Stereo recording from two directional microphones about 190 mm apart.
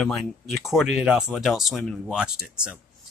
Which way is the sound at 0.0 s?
Centre (ahead or behind).